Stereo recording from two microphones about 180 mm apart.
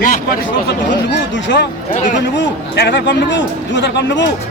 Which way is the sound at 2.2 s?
70° left (ahead or behind).